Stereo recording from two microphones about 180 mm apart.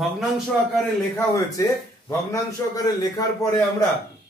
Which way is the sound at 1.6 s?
15° left (ahead or behind).